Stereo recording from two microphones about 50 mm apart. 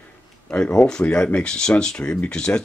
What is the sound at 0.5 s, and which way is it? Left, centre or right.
Speech, left.